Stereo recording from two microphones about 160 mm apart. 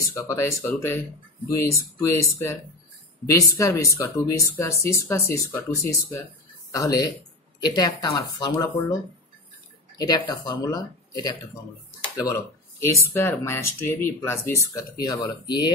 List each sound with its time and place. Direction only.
0.0 s speech: 20° left (ahead or behind)
3.3 s speech: 20° left (ahead or behind)
9.9 s speech: 25° left (ahead or behind)
12.8 s speech: 15° left (ahead or behind)